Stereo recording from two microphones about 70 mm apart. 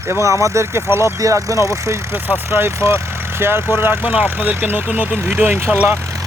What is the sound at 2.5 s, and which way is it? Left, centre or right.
Speech, right.